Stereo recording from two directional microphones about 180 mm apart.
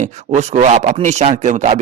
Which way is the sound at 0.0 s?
40° right (ahead or behind).